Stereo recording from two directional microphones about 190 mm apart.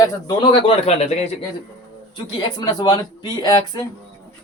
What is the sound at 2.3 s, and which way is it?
A man's voice, 20° left (ahead or behind).